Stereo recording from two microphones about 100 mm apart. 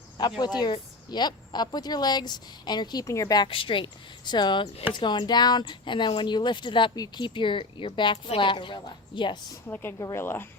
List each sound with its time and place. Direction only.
0.2 s speech: 45° left (ahead or behind)
3.5 s a woman's voice: 60° left (ahead or behind)
4.3 s speech: 50° left (ahead or behind)
6.9 s speech: 40° left (ahead or behind)
7.3 s a woman's voice: 55° left (ahead or behind)
9.6 s speech: 20° left (ahead or behind)